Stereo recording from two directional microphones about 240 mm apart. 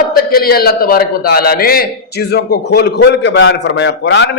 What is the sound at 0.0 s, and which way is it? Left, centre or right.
A man's voice, left.